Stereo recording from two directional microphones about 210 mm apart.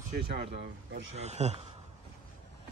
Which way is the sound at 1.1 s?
30° right (ahead or behind).